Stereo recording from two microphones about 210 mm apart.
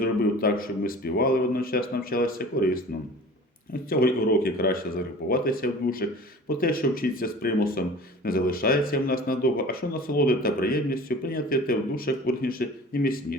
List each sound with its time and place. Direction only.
0.0 s speech: 45° left (ahead or behind)
3.8 s speech: 45° left (ahead or behind)